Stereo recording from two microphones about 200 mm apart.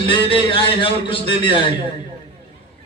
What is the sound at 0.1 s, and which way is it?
A man's voice, 25° left (ahead or behind).